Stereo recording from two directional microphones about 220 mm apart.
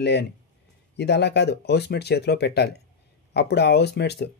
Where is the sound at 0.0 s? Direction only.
50° left (ahead or behind).